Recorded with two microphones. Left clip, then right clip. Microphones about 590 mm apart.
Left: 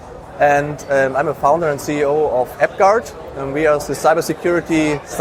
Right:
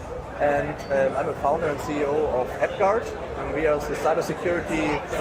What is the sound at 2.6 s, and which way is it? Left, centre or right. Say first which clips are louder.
Speech: left 10 dB; left.